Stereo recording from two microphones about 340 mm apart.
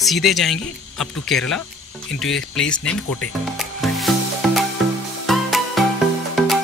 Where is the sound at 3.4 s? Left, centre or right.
Centre.